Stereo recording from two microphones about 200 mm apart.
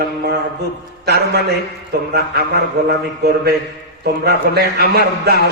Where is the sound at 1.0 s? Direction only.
55° right (ahead or behind).